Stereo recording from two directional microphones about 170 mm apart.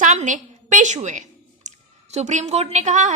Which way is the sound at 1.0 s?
45° right (ahead or behind).